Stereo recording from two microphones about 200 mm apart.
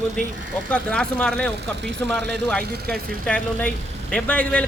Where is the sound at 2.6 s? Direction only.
50° right (ahead or behind).